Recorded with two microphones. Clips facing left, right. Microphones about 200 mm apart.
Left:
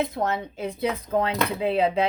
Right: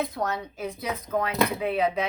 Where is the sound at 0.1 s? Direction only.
25° left (ahead or behind).